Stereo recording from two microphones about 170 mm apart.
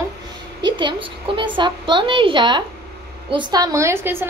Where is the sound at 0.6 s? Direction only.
30° right (ahead or behind).